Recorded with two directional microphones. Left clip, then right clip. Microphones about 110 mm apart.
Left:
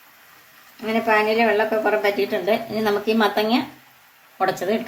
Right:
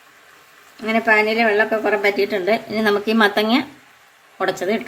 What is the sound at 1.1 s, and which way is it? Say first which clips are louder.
A woman's voice: right 2 dB; 55° right (ahead or behind).